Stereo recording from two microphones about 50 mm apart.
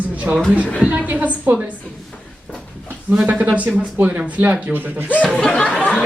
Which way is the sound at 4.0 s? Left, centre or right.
Right.